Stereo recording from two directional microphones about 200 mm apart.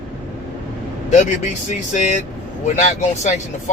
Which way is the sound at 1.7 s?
35° left (ahead or behind).